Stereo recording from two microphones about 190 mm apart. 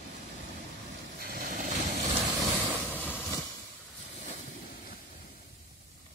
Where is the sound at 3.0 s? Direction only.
10° left (ahead or behind).